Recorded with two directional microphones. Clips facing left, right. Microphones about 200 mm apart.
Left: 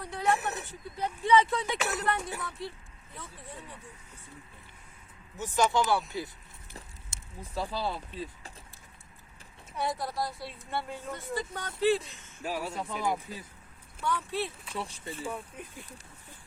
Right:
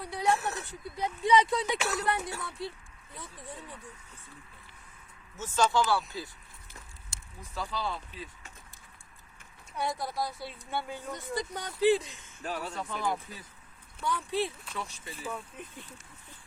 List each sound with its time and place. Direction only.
0.0 s a sound: 10° right (ahead or behind)
0.3 s a sound: 15° left (ahead or behind)
0.9 s speech: 15° right (ahead or behind)
2.3 s speech: 15° left (ahead or behind)
3.2 s speech: 15° right (ahead or behind)
5.4 s speech: 15° left (ahead or behind)
6.7 s speech: 30° left (ahead or behind)
9.7 s a woman's voice: centre (ahead or behind)
11.1 s speech: 15° right (ahead or behind)
12.4 s speech: 10° left (ahead or behind)
14.3 s speech: 15° right (ahead or behind)
14.8 s speech: 30° left (ahead or behind)
15.3 s speech: 10° left (ahead or behind)